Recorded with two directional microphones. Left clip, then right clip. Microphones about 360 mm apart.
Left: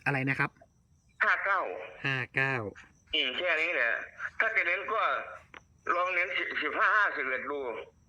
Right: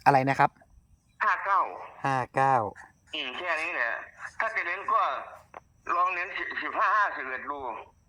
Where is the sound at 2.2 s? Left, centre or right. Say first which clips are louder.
Right 9 dB; right.